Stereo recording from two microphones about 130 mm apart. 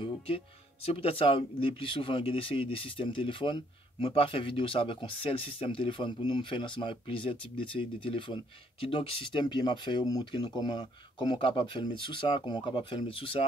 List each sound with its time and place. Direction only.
0.8 s speech: 50° left (ahead or behind)